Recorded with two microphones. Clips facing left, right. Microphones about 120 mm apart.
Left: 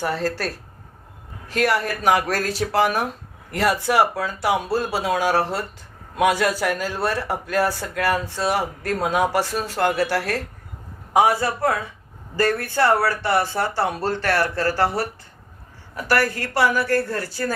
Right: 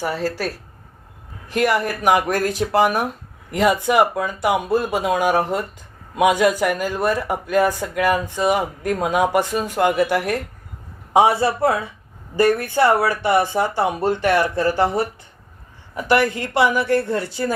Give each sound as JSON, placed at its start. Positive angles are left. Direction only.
{"t": 0.0, "sound": "a woman's voice", "side_deg": -10}